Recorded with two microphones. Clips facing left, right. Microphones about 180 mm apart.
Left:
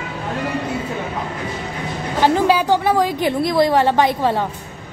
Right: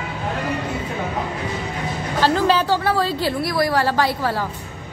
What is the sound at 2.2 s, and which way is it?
A woman's voice, 15° left (ahead or behind).